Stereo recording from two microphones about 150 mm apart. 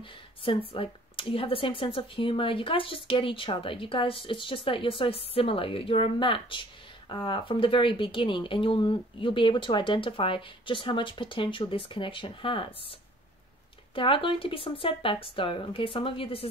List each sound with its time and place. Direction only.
0.4 s speech: 35° left (ahead or behind)
13.9 s speech: 35° left (ahead or behind)